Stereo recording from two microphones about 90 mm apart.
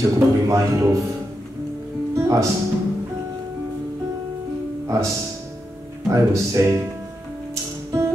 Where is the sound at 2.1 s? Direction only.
35° right (ahead or behind).